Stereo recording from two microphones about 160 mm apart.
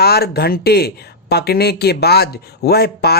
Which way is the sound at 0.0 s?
80° left.